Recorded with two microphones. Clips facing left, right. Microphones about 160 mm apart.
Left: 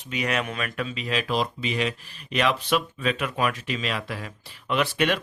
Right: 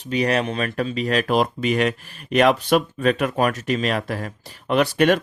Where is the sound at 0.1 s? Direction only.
35° right (ahead or behind).